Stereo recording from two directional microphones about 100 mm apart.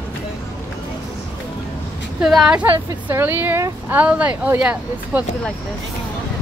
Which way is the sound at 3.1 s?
20° right (ahead or behind).